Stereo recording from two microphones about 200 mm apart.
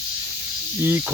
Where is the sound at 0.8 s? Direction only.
10° right (ahead or behind).